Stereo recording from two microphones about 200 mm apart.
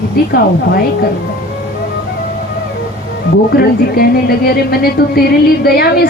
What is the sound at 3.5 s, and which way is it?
A woman's voice, 50° left (ahead or behind).